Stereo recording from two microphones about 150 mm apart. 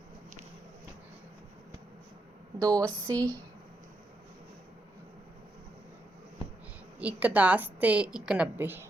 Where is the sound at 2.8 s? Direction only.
10° left (ahead or behind).